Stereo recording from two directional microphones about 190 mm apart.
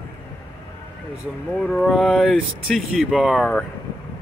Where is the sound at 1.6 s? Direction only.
5° left (ahead or behind).